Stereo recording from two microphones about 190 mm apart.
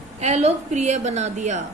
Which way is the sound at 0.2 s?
35° right (ahead or behind).